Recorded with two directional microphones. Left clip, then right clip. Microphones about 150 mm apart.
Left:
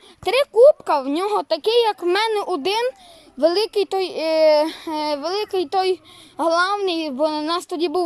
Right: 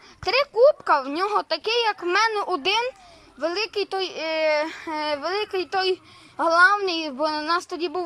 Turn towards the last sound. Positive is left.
turn(degrees=30)  # may be behind; listen again after turning